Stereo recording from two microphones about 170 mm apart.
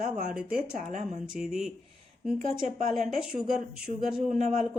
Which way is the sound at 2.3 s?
45° right (ahead or behind).